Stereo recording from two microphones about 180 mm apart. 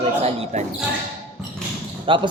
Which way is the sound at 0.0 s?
35° right (ahead or behind).